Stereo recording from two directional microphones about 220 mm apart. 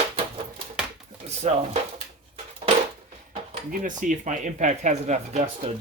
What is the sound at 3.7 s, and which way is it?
Speech, 35° right (ahead or behind).